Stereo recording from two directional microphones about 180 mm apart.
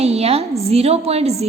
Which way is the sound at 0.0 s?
35° right (ahead or behind).